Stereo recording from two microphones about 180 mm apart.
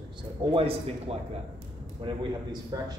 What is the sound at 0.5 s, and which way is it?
Speech, 30° right (ahead or behind).